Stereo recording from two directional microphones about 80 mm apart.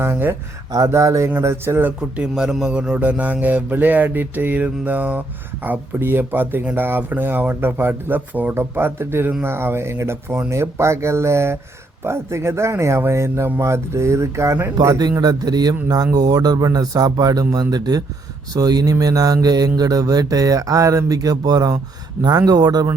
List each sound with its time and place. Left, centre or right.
0.0 s speech: right
2.0 s a man's voice: centre; by 14.7 s right
14.8 s a man's voice: right
15.2 s mantra: right